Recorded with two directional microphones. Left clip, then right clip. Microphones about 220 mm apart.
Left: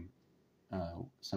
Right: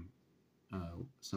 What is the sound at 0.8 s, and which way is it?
Speech, 10° right (ahead or behind).